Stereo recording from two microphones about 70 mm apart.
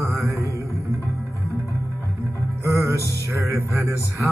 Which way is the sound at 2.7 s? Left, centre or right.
Right.